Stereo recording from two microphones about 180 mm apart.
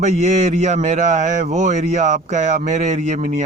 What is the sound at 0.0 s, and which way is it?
Speech, 40° right (ahead or behind).